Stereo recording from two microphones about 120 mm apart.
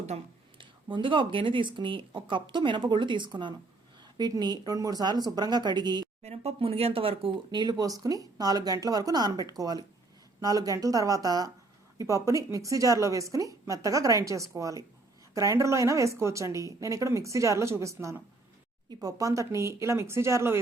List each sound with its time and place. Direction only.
0.1 s speech: 65° right (ahead or behind)
0.6 s speech: 45° right (ahead or behind)
6.2 s a woman's voice: 60° right (ahead or behind); by 20.6 s 20° right (ahead or behind)